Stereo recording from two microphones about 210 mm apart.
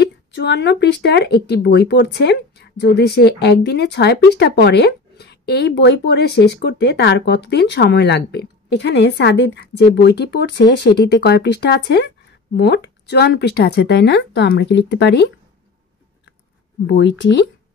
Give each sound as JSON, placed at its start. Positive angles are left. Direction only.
{"t": 0.0, "sound": "speech", "side_deg": 55}
{"t": 16.8, "sound": "speech", "side_deg": 55}